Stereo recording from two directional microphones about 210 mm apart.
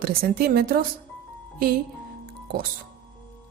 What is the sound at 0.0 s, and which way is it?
Speech, 45° right (ahead or behind).